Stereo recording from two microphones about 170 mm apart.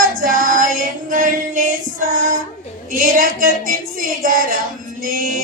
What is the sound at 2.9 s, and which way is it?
A woman's voice, 55° right (ahead or behind).